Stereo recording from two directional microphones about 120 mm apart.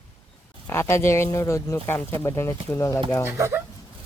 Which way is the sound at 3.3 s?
20° right (ahead or behind).